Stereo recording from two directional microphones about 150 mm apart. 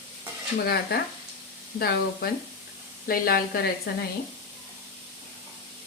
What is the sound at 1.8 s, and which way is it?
Speech, 90° left.